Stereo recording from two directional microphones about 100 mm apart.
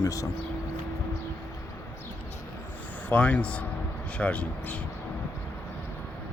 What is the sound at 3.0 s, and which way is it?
Speech, 15° left (ahead or behind).